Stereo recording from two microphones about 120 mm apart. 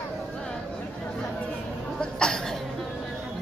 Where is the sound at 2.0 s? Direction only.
5° left (ahead or behind).